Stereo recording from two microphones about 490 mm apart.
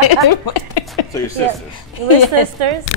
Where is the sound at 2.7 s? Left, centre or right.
Right.